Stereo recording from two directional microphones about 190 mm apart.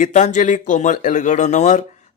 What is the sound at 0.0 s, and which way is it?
A man's voice, 40° left (ahead or behind).